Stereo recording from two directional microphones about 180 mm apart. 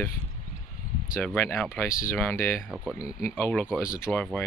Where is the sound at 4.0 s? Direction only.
10° left (ahead or behind).